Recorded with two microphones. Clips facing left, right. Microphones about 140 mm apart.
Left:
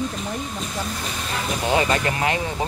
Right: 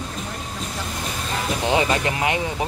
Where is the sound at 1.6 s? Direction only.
15° right (ahead or behind).